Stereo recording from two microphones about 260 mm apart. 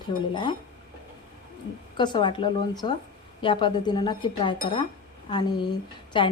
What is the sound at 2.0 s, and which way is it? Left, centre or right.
A woman's voice, centre.